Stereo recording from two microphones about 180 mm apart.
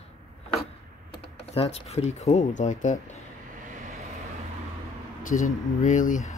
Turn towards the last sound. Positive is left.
turn(degrees=45)  # may be behind; listen again after turning